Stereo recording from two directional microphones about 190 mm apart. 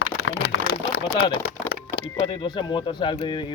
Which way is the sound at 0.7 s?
60° left (ahead or behind).